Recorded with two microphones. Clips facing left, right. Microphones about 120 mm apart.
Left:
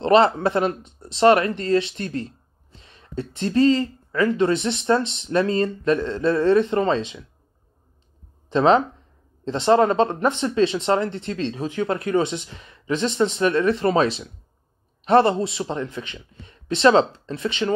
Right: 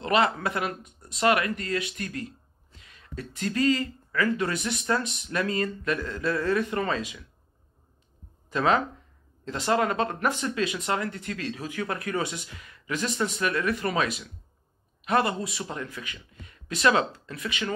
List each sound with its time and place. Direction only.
0.0 s speech: 30° left (ahead or behind)
8.5 s speech: 25° left (ahead or behind)